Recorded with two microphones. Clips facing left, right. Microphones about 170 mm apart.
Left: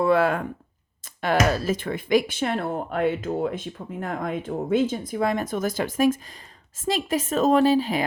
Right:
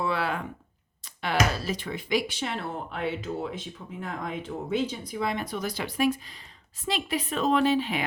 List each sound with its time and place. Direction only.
0.0 s speech: 50° left (ahead or behind)